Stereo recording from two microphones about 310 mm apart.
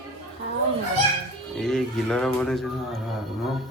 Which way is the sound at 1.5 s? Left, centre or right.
Centre.